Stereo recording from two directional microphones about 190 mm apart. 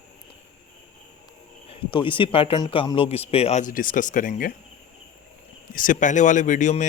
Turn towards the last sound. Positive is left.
turn(degrees=40)  # may be behind; listen again after turning